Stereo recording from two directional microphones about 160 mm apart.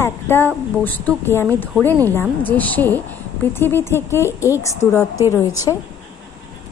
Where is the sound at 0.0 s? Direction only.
15° left (ahead or behind).